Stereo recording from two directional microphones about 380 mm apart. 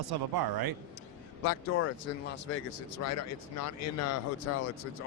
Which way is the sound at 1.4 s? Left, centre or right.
Left.